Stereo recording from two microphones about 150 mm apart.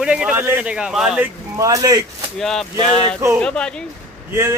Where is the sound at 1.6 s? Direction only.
20° right (ahead or behind).